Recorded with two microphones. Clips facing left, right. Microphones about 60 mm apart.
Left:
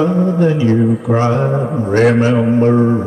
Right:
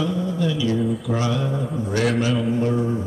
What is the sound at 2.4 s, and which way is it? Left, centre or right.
Speech, left.